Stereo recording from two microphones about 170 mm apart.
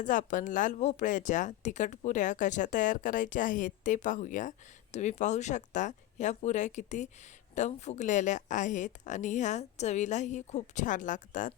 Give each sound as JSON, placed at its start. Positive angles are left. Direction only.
{"t": 0.0, "sound": "speech", "side_deg": 50}